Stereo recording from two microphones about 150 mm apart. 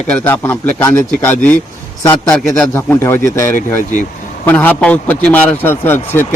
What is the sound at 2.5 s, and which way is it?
Speech, 15° left (ahead or behind).